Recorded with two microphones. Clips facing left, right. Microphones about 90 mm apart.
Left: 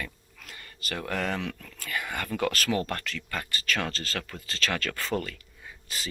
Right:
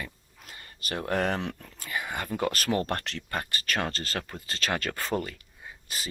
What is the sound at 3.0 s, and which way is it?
Speech, 65° right (ahead or behind).